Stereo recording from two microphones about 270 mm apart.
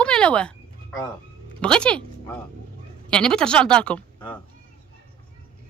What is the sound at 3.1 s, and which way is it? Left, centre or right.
Speech, centre.